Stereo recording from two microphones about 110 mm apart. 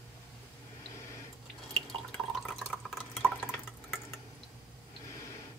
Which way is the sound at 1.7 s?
Centre (ahead or behind).